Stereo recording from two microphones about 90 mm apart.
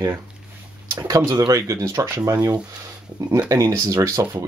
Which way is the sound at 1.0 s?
45° right (ahead or behind).